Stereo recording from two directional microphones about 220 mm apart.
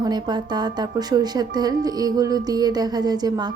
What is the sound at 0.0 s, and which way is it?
A woman's voice, 20° right (ahead or behind).